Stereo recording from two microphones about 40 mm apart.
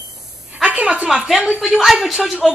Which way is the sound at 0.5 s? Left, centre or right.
Right.